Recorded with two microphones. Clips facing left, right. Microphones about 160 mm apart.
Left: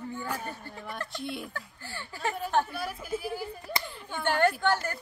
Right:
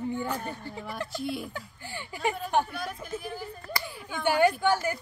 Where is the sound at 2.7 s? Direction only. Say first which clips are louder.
Left 1 dB; 5° left (ahead or behind).